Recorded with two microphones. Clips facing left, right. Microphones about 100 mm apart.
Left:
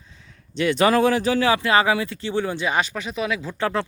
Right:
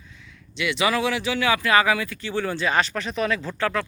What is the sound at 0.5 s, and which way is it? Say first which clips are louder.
Speech: left 5 dB; 40° left (ahead or behind).